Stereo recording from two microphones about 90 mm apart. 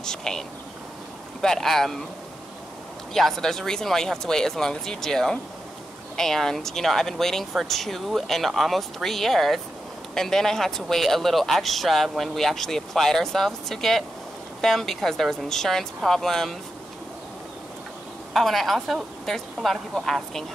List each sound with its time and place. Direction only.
0.0 s speech: 5° left (ahead or behind)
3.1 s speech: 5° left (ahead or behind)
18.3 s speech: centre (ahead or behind)